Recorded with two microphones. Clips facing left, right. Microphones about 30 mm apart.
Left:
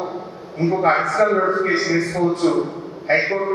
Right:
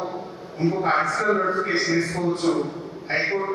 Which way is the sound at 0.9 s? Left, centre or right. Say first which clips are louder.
Left 5 dB; centre.